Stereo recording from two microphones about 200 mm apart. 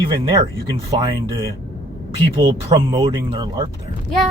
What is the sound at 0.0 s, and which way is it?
Speech, 25° right (ahead or behind).